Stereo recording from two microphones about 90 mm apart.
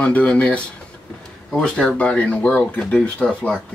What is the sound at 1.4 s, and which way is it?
Speech, centre (ahead or behind).